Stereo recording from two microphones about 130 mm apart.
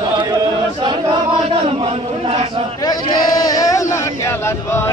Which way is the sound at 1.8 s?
55° right (ahead or behind).